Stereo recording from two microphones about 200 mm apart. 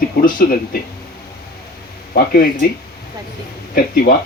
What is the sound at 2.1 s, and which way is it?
Speech, 50° left (ahead or behind).